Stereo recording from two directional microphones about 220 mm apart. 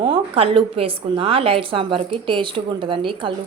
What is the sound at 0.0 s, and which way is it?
A woman's voice, 25° right (ahead or behind).